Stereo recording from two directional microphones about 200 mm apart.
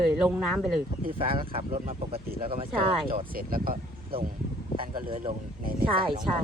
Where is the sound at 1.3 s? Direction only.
25° right (ahead or behind).